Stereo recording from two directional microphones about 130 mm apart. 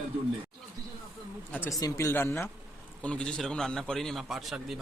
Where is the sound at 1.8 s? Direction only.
20° left (ahead or behind).